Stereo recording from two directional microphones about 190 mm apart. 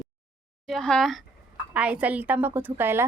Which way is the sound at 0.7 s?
5° left (ahead or behind).